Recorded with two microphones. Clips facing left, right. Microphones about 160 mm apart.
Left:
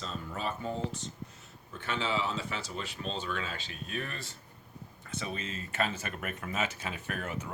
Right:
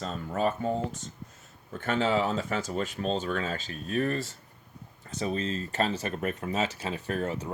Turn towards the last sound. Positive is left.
turn(degrees=-30)  # may be behind; listen again after turning